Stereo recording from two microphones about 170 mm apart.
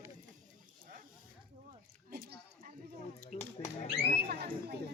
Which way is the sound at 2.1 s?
55° right (ahead or behind).